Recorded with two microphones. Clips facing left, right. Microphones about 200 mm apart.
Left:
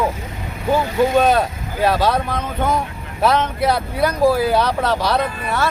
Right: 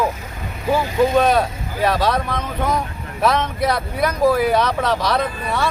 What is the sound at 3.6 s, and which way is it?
Speech, 25° left (ahead or behind).